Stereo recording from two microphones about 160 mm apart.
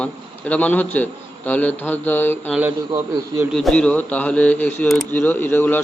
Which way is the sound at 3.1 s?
25° right (ahead or behind).